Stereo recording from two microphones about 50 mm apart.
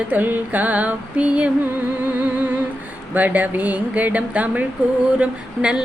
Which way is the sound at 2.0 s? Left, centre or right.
Right.